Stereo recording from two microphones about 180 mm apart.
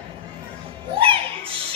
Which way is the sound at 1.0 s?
30° right (ahead or behind).